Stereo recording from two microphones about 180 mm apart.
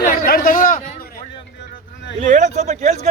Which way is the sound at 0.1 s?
55° left (ahead or behind).